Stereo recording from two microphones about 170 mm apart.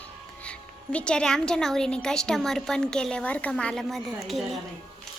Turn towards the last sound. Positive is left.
turn(degrees=0)  # may be behind; listen again after turning